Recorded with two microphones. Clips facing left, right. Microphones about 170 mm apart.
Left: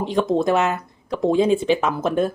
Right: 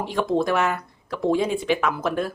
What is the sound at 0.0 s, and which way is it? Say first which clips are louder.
A woman's voice: left 3 dB; 20° left (ahead or behind).